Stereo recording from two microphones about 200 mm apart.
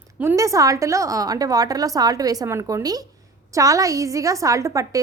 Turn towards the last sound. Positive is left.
turn(degrees=-15)  # may be behind; listen again after turning